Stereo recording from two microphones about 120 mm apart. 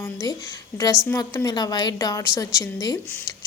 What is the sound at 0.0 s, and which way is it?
A woman's voice, 30° left (ahead or behind).